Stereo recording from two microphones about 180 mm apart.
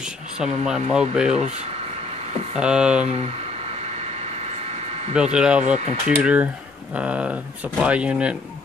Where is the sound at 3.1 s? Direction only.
35° right (ahead or behind).